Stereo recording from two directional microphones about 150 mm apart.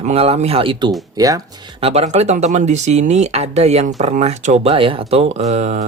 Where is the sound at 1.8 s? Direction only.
45° right (ahead or behind).